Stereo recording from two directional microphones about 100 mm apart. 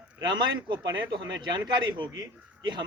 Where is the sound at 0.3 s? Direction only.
50° right (ahead or behind).